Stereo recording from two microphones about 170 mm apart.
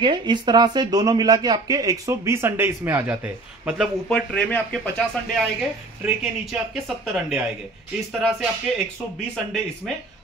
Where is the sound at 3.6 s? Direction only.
Centre (ahead or behind).